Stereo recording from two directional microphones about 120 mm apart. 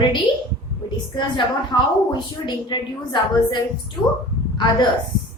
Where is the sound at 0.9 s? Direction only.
45° left (ahead or behind).